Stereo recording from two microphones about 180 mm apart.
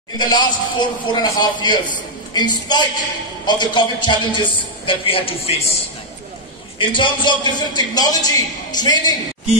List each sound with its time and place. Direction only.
0.2 s a man's voice: 25° left (ahead or behind)
6.8 s a man's voice: 25° left (ahead or behind)